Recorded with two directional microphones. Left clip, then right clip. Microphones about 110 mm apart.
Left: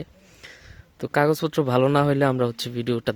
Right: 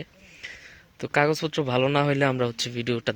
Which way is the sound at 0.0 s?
60° left (ahead or behind).